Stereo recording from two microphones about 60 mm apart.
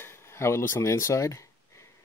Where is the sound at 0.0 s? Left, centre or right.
Left.